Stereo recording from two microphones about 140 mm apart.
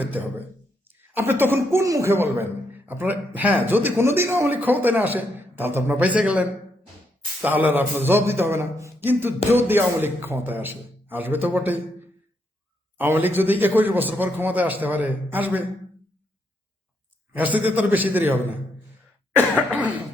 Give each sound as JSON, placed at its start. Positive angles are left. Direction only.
{"t": 0.0, "sound": "speech", "side_deg": -10}
{"t": 17.3, "sound": "speech", "side_deg": -10}